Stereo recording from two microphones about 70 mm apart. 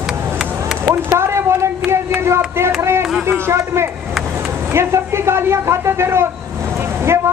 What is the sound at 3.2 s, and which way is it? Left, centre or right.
Music, right.